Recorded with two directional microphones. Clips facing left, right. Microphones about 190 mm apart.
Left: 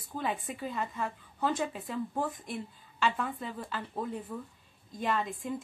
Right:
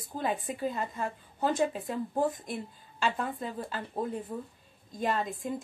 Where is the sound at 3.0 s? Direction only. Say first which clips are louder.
Even; 40° right (ahead or behind).